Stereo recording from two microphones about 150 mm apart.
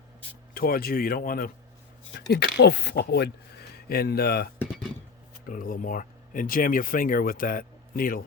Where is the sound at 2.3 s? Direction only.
90° left.